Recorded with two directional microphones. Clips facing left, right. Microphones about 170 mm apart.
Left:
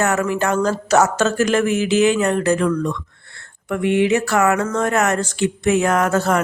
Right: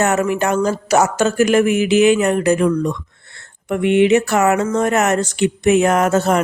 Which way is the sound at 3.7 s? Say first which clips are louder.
Right 4 dB; 20° right (ahead or behind).